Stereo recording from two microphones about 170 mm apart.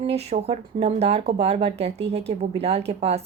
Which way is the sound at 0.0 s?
40° right (ahead or behind).